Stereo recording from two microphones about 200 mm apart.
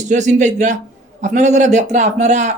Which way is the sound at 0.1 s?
35° right (ahead or behind).